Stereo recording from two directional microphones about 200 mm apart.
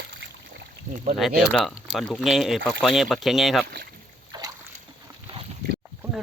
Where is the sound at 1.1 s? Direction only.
Centre (ahead or behind).